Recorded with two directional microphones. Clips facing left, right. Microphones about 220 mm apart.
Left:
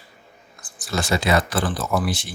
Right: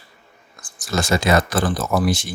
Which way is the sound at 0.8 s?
45° right (ahead or behind).